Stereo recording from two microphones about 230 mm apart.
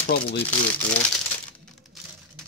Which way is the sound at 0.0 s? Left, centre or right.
Left.